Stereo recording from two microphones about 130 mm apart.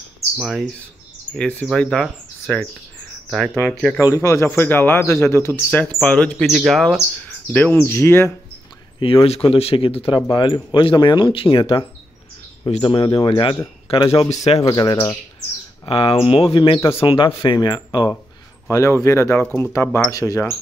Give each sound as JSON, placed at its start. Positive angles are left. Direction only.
{"t": 0.4, "sound": "speech", "side_deg": 0}
{"t": 4.0, "sound": "a man's voice", "side_deg": 25}
{"t": 5.9, "sound": "speech", "side_deg": 10}
{"t": 6.3, "sound": "speech", "side_deg": 0}
{"t": 7.5, "sound": "speech", "side_deg": 15}
{"t": 9.0, "sound": "speech", "side_deg": 45}
{"t": 10.2, "sound": "speech", "side_deg": 35}
{"t": 15.8, "sound": "speech", "side_deg": 45}
{"t": 18.7, "sound": "a man's voice", "side_deg": 20}